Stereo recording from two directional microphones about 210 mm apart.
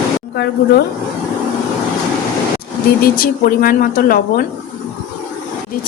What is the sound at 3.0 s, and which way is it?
Speech, 45° left (ahead or behind).